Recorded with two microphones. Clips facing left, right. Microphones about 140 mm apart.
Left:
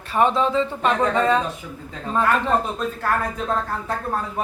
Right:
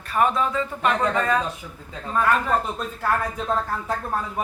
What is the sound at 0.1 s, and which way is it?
Speech, 25° left (ahead or behind).